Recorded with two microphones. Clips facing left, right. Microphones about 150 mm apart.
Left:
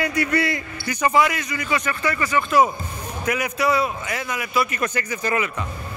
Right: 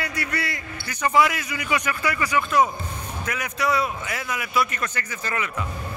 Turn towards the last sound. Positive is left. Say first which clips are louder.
# left 6 dB
turn(degrees=15)  # may be behind; listen again after turning